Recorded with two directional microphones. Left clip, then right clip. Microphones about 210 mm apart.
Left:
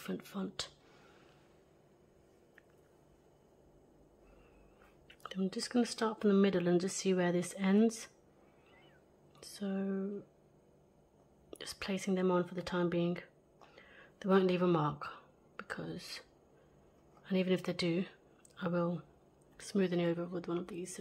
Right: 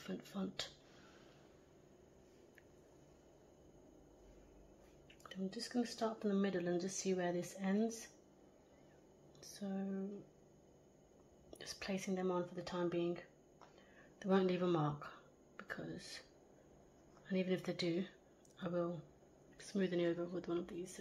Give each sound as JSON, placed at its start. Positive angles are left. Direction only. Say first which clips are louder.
{"t": 0.0, "sound": "speech", "louder": "left 4 dB", "side_deg": 25}
{"t": 5.2, "sound": "speech", "louder": "left 7 dB", "side_deg": 35}
{"t": 9.4, "sound": "speech", "louder": "left 6 dB", "side_deg": 30}
{"t": 11.5, "sound": "speech", "louder": "left 4 dB", "side_deg": 30}
{"t": 14.2, "sound": "speech", "louder": "left 6 dB", "side_deg": 25}